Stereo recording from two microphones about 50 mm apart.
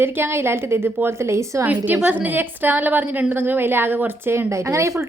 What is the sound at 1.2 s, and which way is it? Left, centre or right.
Speech, right.